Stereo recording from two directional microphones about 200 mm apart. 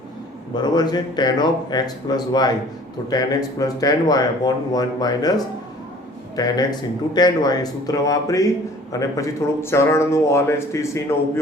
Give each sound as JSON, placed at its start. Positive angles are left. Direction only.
{"t": 0.5, "sound": "speech", "side_deg": 20}
{"t": 6.3, "sound": "a man's voice", "side_deg": 20}